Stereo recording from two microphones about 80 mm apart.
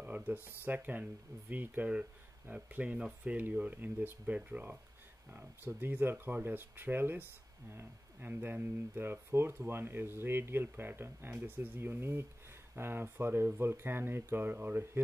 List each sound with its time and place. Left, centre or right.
0.0 s speech: right